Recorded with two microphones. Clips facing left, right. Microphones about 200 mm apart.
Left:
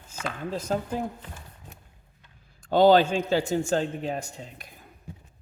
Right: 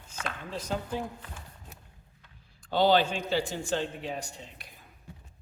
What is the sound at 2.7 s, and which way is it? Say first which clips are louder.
A man's voice: left 6 dB; 45° left (ahead or behind).